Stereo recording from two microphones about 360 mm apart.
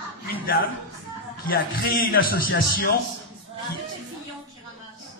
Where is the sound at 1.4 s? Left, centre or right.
Left.